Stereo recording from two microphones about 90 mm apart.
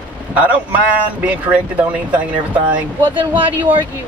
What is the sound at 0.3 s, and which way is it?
Speech, 15° right (ahead or behind).